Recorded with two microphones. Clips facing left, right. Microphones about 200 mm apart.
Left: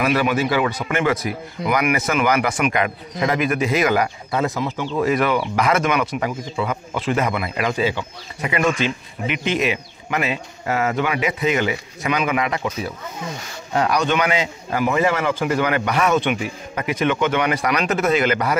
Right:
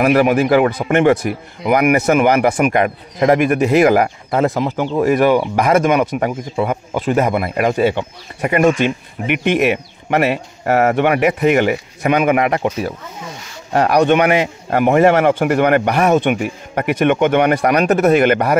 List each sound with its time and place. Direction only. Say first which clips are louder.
0.0 s a man's voice: right 6 dB; 50° right (ahead or behind)
13.7 s a man's voice: right 7 dB; 60° right (ahead or behind)